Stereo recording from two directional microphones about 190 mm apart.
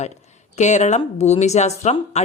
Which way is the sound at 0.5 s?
40° left (ahead or behind).